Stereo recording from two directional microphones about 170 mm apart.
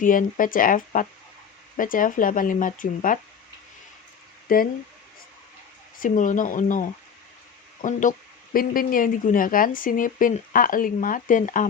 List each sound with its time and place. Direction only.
0.0 s speech: 50° left (ahead or behind)
4.4 s speech: 55° left (ahead or behind)
6.0 s speech: 50° left (ahead or behind)